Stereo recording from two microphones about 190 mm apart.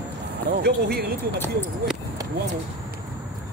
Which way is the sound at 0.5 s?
60° right (ahead or behind).